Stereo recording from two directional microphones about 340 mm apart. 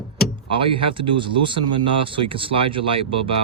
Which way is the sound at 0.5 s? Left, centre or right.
Centre.